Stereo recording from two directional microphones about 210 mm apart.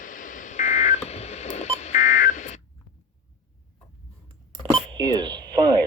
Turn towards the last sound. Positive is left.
turn(degrees=-20)  # may be behind; listen again after turning